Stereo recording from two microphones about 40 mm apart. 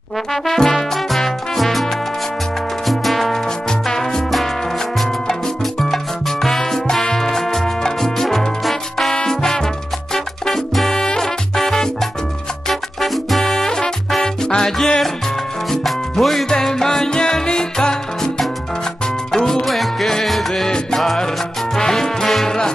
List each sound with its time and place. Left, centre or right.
0.3 s trombone: centre
0.7 s music: centre
5.3 s salsa music: centre
6.4 s music: centre
16.4 s music: centre
19.3 s music: centre
19.6 s music: centre